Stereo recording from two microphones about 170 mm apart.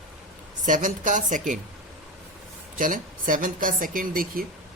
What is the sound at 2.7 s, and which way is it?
Speech, 50° right (ahead or behind).